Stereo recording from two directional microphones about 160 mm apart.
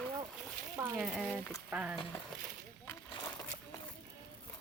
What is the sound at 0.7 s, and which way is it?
Speech, 10° right (ahead or behind).